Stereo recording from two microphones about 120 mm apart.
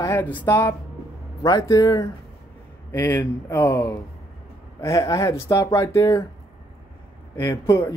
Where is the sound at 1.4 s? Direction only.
30° left (ahead or behind).